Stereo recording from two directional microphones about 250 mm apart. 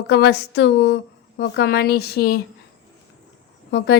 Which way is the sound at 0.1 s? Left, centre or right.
Left.